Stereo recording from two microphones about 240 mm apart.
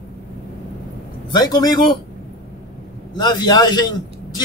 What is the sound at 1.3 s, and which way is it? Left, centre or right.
Speech, centre.